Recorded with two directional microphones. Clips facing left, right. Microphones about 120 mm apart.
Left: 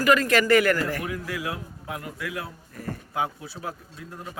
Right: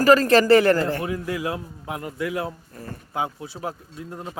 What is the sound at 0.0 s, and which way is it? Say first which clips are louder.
Speech: right 5 dB; 35° right (ahead or behind).